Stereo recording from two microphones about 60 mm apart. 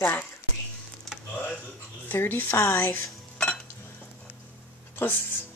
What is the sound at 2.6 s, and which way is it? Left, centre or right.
Speech, left.